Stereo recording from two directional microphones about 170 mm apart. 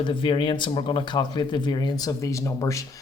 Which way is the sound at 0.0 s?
30° left (ahead or behind).